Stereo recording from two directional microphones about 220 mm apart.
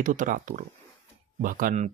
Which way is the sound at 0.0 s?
35° right (ahead or behind).